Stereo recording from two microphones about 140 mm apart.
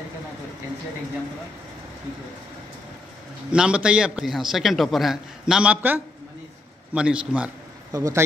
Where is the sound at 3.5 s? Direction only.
5° right (ahead or behind).